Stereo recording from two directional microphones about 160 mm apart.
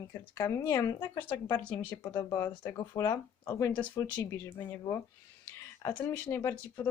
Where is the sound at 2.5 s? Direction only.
25° left (ahead or behind).